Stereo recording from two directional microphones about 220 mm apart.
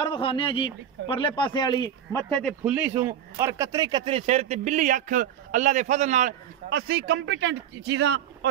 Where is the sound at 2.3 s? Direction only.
Centre (ahead or behind).